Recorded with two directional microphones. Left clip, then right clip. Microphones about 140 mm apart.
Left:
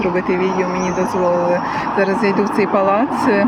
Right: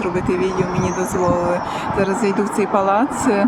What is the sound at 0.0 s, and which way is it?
Speech, 20° right (ahead or behind).